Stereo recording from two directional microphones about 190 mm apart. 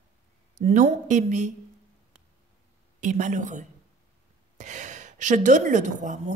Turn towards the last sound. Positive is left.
turn(degrees=-40)  # may be behind; listen again after turning